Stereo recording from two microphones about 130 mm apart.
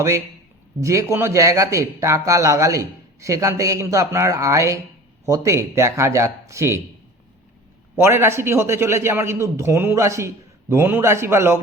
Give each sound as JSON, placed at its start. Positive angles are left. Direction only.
{"t": 0.8, "sound": "speech", "side_deg": -25}
{"t": 7.9, "sound": "speech", "side_deg": -20}